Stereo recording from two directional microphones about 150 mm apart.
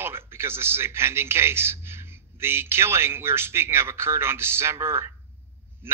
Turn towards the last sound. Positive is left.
turn(degrees=-15)  # may be behind; listen again after turning